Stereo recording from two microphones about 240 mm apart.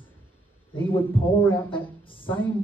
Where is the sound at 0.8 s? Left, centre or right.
Centre.